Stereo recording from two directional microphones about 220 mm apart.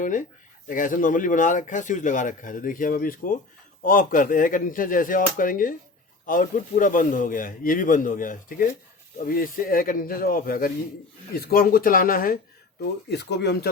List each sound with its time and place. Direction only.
0.0 s speech: 35° left (ahead or behind)